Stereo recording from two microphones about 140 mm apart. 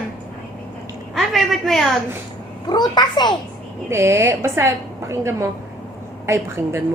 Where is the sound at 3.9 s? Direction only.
20° right (ahead or behind).